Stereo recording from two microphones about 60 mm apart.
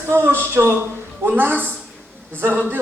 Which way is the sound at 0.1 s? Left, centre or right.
Right.